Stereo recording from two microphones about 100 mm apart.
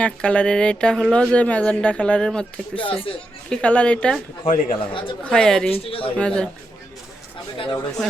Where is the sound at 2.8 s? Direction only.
60° left (ahead or behind).